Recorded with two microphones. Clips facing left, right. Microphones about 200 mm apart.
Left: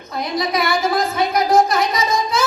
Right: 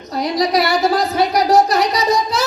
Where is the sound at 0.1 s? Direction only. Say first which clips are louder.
Right 4 dB; 40° right (ahead or behind).